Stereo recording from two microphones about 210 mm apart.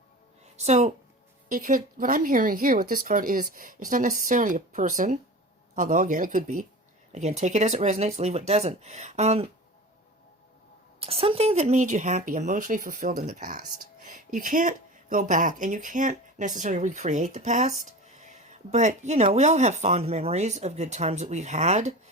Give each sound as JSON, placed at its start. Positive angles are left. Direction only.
{"t": 0.5, "sound": "a woman's voice", "side_deg": -30}
{"t": 11.0, "sound": "speech", "side_deg": -25}